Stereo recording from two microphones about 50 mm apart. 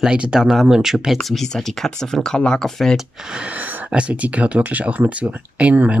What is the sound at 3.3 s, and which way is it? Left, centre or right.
Speech, right.